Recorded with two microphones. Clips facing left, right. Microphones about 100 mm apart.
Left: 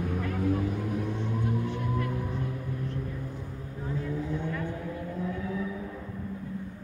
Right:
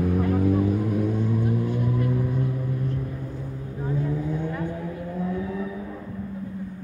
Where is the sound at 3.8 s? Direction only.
25° right (ahead or behind).